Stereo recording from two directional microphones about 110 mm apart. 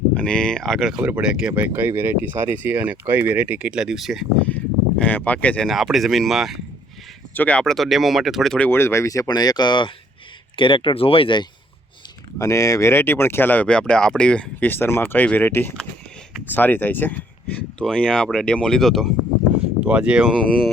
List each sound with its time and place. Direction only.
0.1 s speech: 10° left (ahead or behind)
4.4 s speech: 15° left (ahead or behind)
5.6 s speech: centre (ahead or behind)
7.3 s speech: 10° left (ahead or behind)
8.5 s speech: 15° left (ahead or behind); by 11.4 s 50° left (ahead or behind)
12.4 s speech: 30° left (ahead or behind); by 19.1 s centre (ahead or behind)
19.8 s speech: 10° right (ahead or behind)
20.3 s speech: 5° left (ahead or behind)